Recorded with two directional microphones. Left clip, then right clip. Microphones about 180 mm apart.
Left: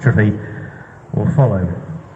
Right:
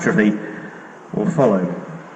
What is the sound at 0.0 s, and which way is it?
A man's voice, 60° left (ahead or behind).